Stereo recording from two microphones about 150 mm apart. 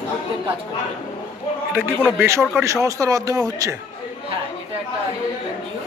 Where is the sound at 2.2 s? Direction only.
15° right (ahead or behind).